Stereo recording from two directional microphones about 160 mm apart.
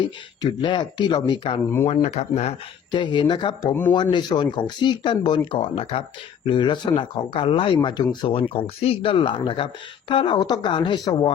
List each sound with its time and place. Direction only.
0.6 s speech: 30° left (ahead or behind)
2.0 s speech: 45° left (ahead or behind)
2.9 s speech: 30° left (ahead or behind)